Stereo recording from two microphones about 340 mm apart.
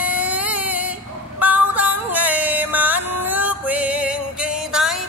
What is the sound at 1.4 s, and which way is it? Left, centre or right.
Music, centre.